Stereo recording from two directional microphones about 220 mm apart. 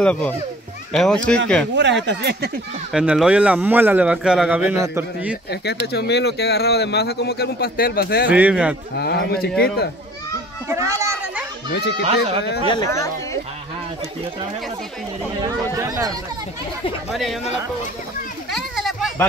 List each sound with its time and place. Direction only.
0.0 s speech: 5° left (ahead or behind)
1.8 s speech: 55° right (ahead or behind)
2.9 s speech: 5° right (ahead or behind)
5.5 s speech: 50° left (ahead or behind)
8.3 s speech: 5° right (ahead or behind)
8.9 s speech: 45° left (ahead or behind)
10.7 s a sound: 15° right (ahead or behind)
12.0 s speech: 25° right (ahead or behind)
12.6 s speech: 15° left (ahead or behind)
15.8 s speech: 15° right (ahead or behind)
17.1 s speech: centre (ahead or behind)
18.5 s children playing: centre (ahead or behind)